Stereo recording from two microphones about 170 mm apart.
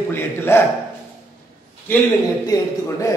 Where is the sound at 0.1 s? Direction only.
15° left (ahead or behind).